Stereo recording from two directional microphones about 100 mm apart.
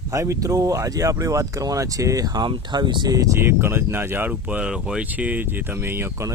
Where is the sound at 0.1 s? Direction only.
30° right (ahead or behind).